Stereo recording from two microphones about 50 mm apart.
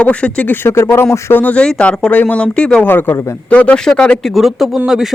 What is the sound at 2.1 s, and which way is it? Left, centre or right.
Speech, left.